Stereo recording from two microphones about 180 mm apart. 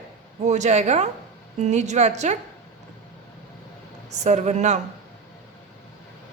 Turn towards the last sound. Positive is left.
turn(degrees=-40)  # may be behind; listen again after turning